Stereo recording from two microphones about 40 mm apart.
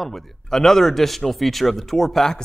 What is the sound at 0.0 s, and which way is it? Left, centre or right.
A man's voice, centre.